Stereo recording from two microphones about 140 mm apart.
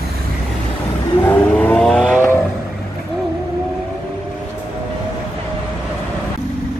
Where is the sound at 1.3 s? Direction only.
10° left (ahead or behind).